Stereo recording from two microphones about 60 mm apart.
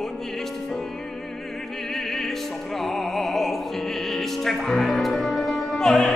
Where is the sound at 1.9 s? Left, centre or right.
Centre.